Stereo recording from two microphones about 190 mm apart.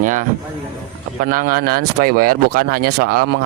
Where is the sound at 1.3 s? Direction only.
50° right (ahead or behind).